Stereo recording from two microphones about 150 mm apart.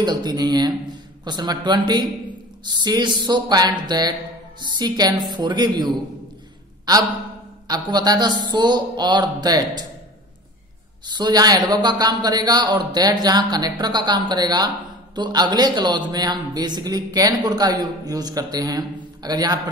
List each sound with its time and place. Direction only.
0.0 s a man's voice: 25° right (ahead or behind)
11.1 s a man's voice: 25° right (ahead or behind)